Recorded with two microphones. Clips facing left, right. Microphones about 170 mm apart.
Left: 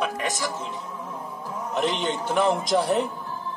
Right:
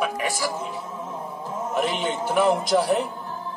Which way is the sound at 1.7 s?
5° right (ahead or behind).